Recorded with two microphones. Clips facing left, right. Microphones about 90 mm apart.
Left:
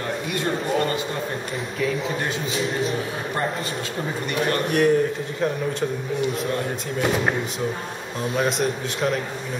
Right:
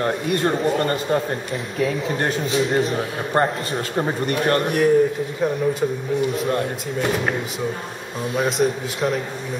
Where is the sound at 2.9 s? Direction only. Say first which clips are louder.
Right 4 dB; 45° right (ahead or behind).